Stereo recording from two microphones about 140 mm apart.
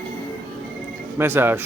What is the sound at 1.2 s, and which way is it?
Speech, 15° right (ahead or behind).